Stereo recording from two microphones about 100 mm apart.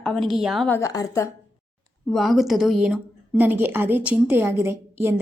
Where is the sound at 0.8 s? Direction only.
35° left (ahead or behind).